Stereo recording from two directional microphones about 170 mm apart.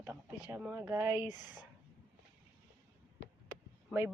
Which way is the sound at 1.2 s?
25° left (ahead or behind).